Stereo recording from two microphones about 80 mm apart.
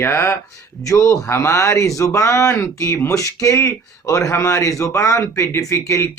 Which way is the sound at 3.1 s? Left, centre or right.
Left.